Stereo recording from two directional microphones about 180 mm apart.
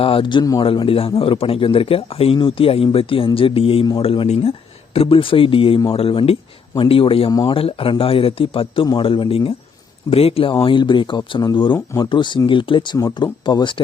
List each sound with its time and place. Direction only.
0.0 s a man's voice: 30° left (ahead or behind)